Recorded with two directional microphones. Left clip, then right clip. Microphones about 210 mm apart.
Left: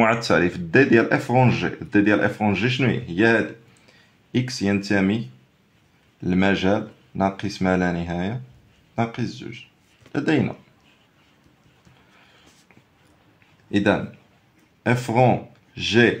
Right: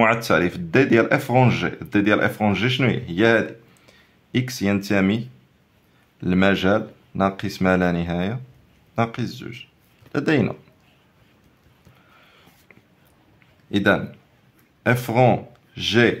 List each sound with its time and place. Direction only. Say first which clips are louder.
0.0 s speech: right 1 dB; 5° right (ahead or behind)
6.2 s speech: right 2 dB; 20° right (ahead or behind)
13.7 s speech: right 1 dB; 10° right (ahead or behind)